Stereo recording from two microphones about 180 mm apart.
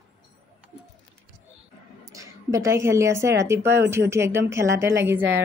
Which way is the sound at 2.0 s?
20° right (ahead or behind).